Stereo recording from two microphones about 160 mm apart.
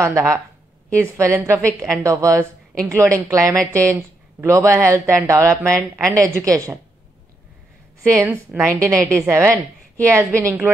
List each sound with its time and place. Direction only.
0.0 s a woman's voice: 20° right (ahead or behind)
8.2 s speech: 15° right (ahead or behind)